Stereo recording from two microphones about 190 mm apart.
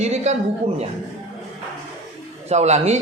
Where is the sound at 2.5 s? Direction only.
35° right (ahead or behind).